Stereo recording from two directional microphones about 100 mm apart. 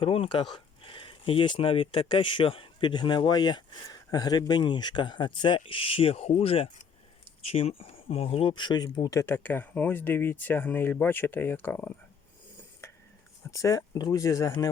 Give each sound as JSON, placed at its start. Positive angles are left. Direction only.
{"t": 0.0, "sound": "speech", "side_deg": 65}
{"t": 7.4, "sound": "speech", "side_deg": 85}
{"t": 8.5, "sound": "speech", "side_deg": 45}
{"t": 9.2, "sound": "speech", "side_deg": 20}
{"t": 13.5, "sound": "speech", "side_deg": 35}